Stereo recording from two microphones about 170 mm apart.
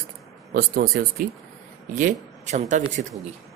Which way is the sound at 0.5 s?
60° right (ahead or behind).